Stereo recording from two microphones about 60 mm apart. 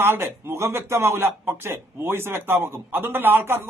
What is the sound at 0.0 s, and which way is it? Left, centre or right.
Speech, right.